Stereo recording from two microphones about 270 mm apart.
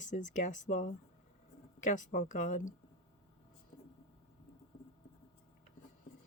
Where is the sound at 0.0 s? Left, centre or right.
Left.